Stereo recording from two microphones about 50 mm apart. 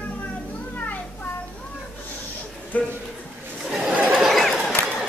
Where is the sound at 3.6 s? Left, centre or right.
Centre.